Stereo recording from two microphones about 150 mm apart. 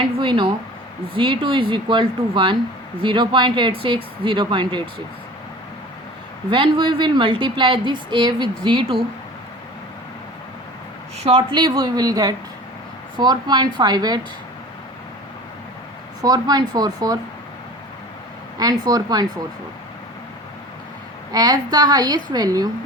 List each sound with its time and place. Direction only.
0.2 s a woman's voice: 35° right (ahead or behind)
6.5 s a woman's voice: 35° right (ahead or behind)
11.2 s a woman's voice: 40° right (ahead or behind)
11.5 s a woman's voice: 30° right (ahead or behind)
16.2 s a woman's voice: 25° right (ahead or behind)
18.5 s a woman's voice: 25° right (ahead or behind)
21.3 s a woman's voice: 25° right (ahead or behind)